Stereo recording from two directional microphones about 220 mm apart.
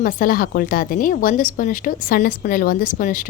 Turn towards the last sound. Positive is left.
turn(degrees=40)  # may be behind; listen again after turning